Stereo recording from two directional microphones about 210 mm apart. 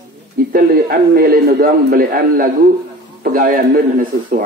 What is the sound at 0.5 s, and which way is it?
A man's voice, 45° right (ahead or behind).